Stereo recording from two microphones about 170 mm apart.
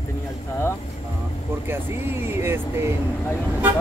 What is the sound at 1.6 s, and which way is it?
Speech, 15° right (ahead or behind).